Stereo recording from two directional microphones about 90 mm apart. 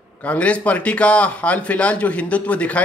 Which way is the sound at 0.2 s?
15° left (ahead or behind).